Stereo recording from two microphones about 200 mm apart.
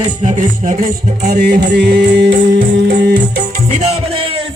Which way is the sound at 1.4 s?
55° right (ahead or behind).